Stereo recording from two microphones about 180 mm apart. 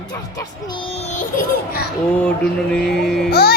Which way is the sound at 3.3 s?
60° left (ahead or behind).